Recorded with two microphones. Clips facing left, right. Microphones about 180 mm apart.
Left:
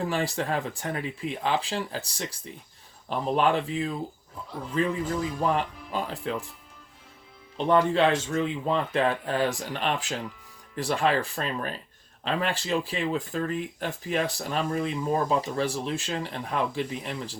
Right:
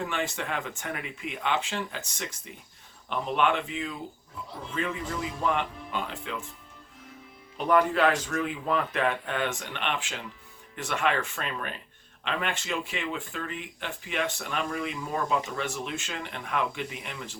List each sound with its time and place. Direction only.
0.0 s speech: 35° left (ahead or behind)
7.5 s speech: 25° left (ahead or behind)